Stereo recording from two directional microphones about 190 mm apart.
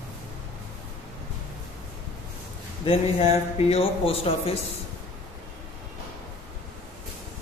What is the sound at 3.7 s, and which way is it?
Speech, 30° left (ahead or behind).